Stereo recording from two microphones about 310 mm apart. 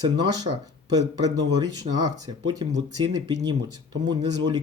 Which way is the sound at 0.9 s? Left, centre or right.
Centre.